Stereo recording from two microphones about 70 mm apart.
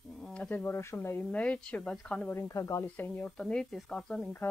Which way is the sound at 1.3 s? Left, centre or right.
Centre.